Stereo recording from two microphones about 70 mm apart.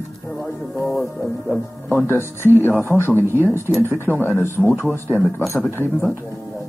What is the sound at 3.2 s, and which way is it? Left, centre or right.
Speech, right.